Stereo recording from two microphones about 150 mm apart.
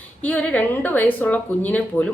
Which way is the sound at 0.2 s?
10° left (ahead or behind).